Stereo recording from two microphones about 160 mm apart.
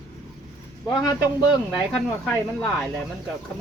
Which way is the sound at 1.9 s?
10° left (ahead or behind).